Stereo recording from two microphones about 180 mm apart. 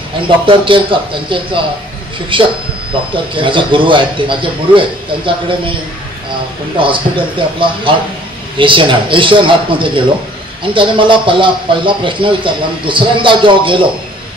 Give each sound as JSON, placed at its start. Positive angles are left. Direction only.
{"t": 0.5, "sound": "a man's voice", "side_deg": -30}
{"t": 6.8, "sound": "a man's voice", "side_deg": -30}